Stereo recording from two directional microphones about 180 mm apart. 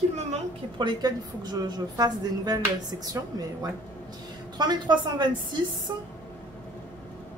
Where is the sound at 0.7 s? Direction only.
25° right (ahead or behind).